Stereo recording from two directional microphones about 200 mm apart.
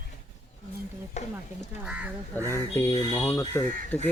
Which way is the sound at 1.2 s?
35° left (ahead or behind).